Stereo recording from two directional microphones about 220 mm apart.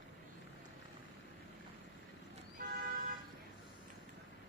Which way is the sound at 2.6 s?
45° right (ahead or behind).